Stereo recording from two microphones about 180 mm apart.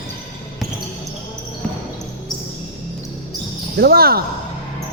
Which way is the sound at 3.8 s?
60° right (ahead or behind).